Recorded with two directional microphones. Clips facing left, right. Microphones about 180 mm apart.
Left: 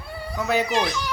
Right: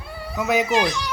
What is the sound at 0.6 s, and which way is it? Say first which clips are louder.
Speech: right 3 dB; centre (ahead or behind).